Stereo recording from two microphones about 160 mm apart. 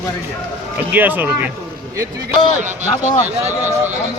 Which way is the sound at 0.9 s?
10° right (ahead or behind).